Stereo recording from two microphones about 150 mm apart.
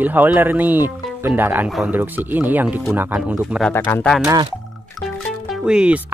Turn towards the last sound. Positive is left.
turn(degrees=-5)  # may be behind; listen again after turning